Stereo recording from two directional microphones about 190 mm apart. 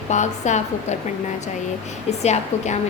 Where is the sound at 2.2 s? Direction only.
35° left (ahead or behind).